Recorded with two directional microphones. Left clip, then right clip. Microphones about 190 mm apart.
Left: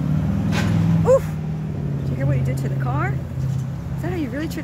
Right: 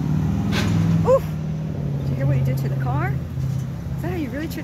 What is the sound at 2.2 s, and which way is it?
Speech, 5° left (ahead or behind).